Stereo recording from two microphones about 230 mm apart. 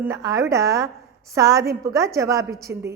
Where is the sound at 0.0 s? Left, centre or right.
Centre.